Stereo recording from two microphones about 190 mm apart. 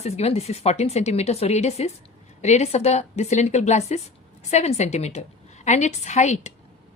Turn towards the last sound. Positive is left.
turn(degrees=35)  # may be behind; listen again after turning